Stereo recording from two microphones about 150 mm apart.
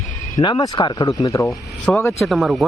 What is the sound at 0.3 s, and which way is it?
Speech, 25° left (ahead or behind).